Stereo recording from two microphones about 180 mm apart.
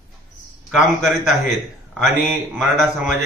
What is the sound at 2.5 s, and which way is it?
Speech, 5° right (ahead or behind).